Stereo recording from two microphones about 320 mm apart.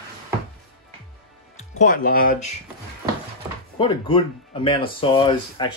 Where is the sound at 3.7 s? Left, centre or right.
Centre.